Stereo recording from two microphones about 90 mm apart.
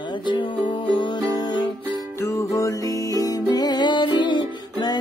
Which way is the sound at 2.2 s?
35° left (ahead or behind).